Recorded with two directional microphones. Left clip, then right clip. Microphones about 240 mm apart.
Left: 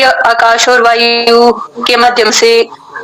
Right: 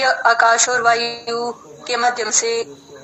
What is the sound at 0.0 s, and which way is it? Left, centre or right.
Speech, left.